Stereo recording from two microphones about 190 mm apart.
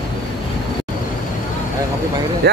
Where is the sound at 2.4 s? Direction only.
55° right (ahead or behind).